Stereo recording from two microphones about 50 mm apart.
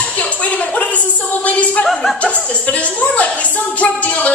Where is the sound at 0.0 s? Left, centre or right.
Left.